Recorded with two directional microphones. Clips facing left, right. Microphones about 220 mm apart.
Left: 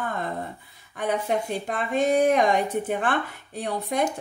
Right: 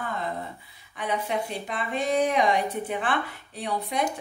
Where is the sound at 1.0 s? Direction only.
50° left (ahead or behind).